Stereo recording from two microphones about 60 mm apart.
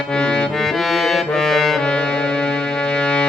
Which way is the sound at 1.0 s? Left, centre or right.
Centre.